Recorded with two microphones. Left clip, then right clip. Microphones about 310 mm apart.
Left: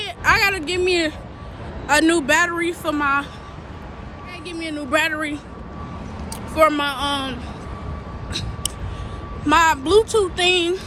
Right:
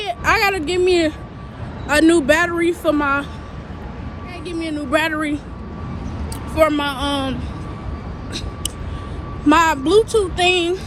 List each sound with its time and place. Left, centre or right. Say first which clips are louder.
0.0 s a sound: right 1 dB; centre
1.9 s speech: right 2 dB; centre
4.4 s speech: right 3 dB; centre
6.5 s speech: even; centre
8.3 s vehicle: left 1 dB; centre
9.5 s speech: right 1 dB; centre